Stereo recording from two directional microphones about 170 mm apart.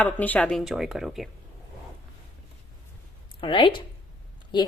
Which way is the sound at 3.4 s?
30° left (ahead or behind).